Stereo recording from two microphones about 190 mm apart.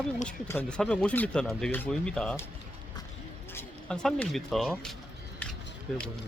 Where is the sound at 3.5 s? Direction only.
10° left (ahead or behind).